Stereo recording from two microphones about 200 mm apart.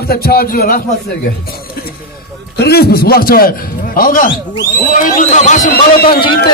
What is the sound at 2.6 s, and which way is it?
A man's voice, 50° left (ahead or behind).